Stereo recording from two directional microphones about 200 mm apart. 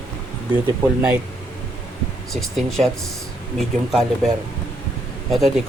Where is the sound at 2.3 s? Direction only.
Centre (ahead or behind).